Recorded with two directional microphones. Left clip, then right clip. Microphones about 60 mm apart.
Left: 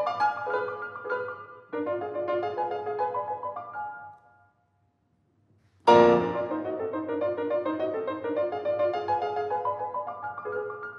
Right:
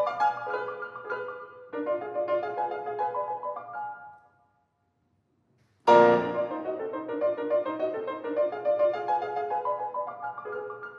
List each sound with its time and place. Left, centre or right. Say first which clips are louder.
0.7 s music: left 3 dB; left
5.9 s music: even; centre